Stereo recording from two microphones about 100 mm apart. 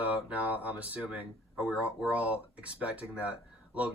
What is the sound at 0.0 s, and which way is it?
Speech, 15° right (ahead or behind).